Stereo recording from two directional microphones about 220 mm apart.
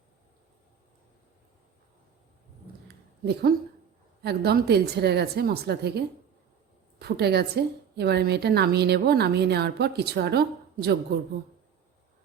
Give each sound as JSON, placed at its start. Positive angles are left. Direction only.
{"t": 2.8, "sound": "a sound", "side_deg": -45}
{"t": 4.2, "sound": "a woman's voice", "side_deg": -45}
{"t": 7.0, "sound": "a woman's voice", "side_deg": -50}